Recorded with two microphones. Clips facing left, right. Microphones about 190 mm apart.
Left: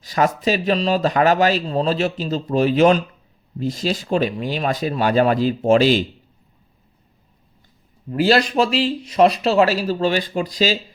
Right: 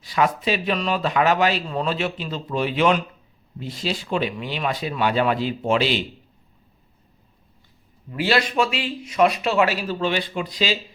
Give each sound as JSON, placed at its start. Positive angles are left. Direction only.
{"t": 0.0, "sound": "speech", "side_deg": 40}
{"t": 8.1, "sound": "speech", "side_deg": 40}